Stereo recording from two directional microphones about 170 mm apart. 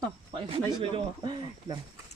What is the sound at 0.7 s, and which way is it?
Speech, 25° right (ahead or behind).